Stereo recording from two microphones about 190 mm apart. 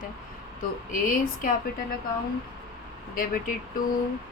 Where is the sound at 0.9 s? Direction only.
45° left (ahead or behind).